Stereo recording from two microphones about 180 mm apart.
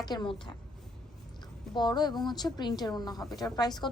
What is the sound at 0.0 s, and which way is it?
Speech, 25° left (ahead or behind).